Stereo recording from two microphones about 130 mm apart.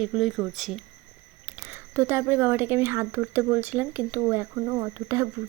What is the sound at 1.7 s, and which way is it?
A woman's voice, 20° right (ahead or behind).